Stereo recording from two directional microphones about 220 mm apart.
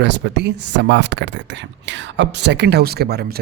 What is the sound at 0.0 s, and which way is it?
Speech, 50° right (ahead or behind).